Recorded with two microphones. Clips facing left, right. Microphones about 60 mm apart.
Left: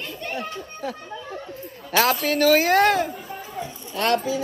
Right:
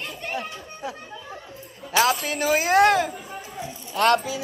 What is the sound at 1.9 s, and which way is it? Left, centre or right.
A man's voice, left.